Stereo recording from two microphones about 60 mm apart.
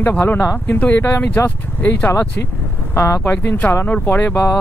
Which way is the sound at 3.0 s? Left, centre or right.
Left.